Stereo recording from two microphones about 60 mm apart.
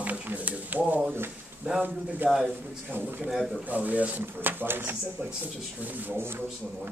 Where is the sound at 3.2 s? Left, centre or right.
Centre.